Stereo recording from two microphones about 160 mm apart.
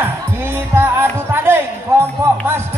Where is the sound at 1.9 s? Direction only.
15° right (ahead or behind).